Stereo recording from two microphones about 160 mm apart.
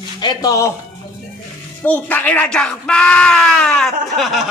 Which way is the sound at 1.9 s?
10° left (ahead or behind).